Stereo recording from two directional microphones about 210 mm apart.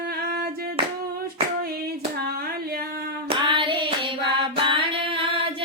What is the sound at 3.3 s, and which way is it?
Child singing, 25° right (ahead or behind).